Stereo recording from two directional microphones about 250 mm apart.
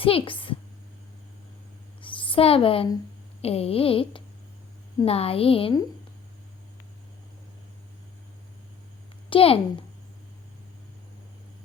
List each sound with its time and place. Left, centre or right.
0.0 s a woman's voice: left
2.0 s a sound: left
3.4 s a woman's voice: left
9.3 s a child's voice: left